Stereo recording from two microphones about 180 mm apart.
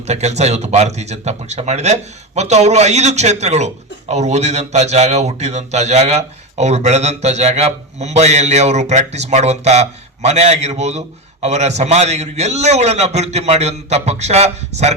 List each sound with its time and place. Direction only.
0.1 s a man's voice: 40° right (ahead or behind)